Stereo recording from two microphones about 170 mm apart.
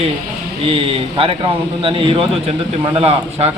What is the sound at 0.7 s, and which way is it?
A man's voice, 35° right (ahead or behind).